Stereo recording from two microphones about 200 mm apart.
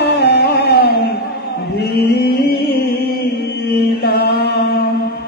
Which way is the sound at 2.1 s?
50° left (ahead or behind).